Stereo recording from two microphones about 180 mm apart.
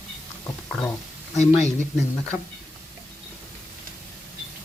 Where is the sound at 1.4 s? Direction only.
40° left (ahead or behind).